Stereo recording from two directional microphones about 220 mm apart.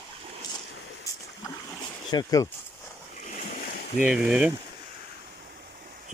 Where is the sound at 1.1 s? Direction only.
15° left (ahead or behind).